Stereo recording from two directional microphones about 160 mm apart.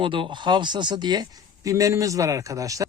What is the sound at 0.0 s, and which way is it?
Speech, 30° right (ahead or behind).